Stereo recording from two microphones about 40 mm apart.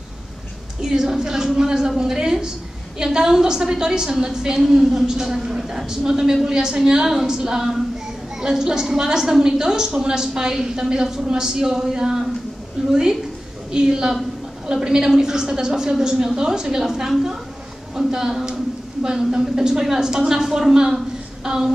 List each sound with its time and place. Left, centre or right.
0.8 s a woman's voice: centre